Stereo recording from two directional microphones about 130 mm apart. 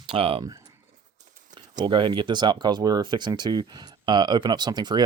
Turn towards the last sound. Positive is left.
turn(degrees=-35)  # may be behind; listen again after turning